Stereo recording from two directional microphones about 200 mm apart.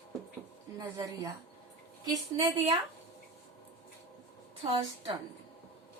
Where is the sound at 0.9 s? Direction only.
15° right (ahead or behind).